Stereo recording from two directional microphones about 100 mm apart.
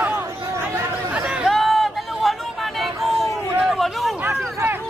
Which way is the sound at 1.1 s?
10° right (ahead or behind).